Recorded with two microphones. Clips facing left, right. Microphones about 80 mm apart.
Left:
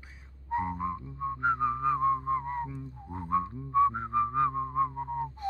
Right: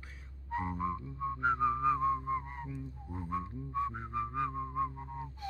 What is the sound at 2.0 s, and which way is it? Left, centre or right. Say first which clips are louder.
Music: left 5 dB; left.